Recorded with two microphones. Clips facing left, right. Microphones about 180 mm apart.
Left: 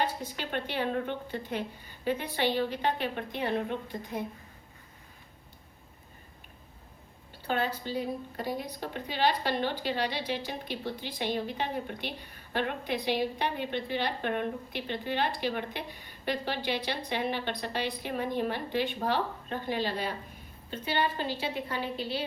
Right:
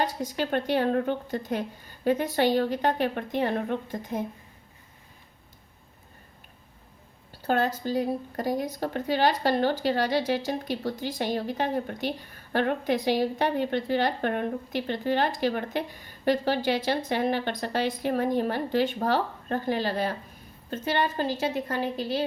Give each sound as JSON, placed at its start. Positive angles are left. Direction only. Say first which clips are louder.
{"t": 0.0, "sound": "a woman's voice", "louder": "right 5 dB", "side_deg": -45}
{"t": 7.4, "sound": "a woman's voice", "louder": "right 5 dB", "side_deg": -45}